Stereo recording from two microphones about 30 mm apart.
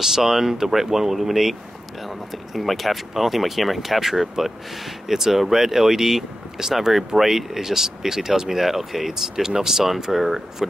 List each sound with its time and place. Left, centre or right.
0.0 s speech: centre